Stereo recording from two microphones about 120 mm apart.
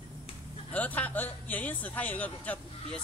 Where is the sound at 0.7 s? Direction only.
15° left (ahead or behind).